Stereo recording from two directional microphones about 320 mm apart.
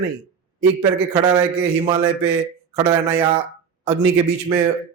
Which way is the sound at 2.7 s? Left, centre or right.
Centre.